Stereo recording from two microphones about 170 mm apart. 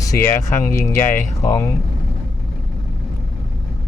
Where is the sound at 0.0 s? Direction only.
20° left (ahead or behind).